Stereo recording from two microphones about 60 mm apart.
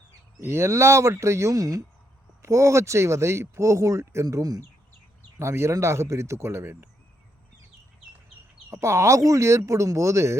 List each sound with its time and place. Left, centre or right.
0.3 s speech: right
2.4 s speech: right
5.4 s speech: right
8.7 s speech: right